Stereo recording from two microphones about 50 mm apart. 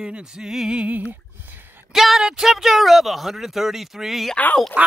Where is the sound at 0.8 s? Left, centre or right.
Right.